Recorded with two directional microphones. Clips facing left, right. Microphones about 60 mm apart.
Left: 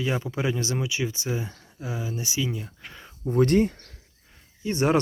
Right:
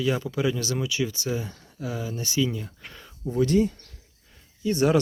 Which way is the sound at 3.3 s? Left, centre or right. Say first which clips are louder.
Left 2 dB; left.